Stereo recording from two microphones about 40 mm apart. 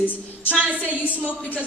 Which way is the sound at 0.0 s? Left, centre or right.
Left.